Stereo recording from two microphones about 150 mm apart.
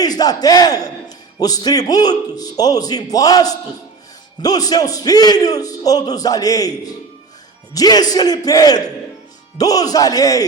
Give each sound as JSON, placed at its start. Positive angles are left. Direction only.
{"t": 0.0, "sound": "a man's voice", "side_deg": 25}